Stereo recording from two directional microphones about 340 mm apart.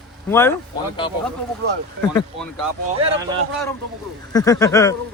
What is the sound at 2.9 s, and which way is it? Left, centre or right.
Speech, centre.